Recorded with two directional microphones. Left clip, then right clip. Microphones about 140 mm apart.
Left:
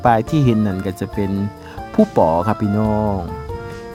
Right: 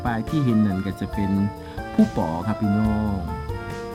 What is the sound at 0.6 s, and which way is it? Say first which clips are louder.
Speech: left 4 dB; 40° left (ahead or behind).